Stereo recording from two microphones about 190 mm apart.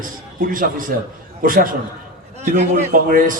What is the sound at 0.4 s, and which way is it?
A man's voice, 45° right (ahead or behind).